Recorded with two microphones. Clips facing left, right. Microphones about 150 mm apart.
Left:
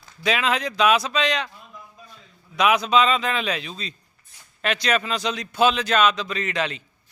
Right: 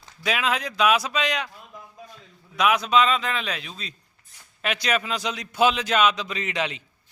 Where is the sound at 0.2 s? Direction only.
5° right (ahead or behind).